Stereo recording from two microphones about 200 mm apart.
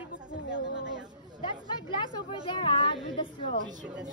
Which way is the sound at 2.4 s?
25° left (ahead or behind).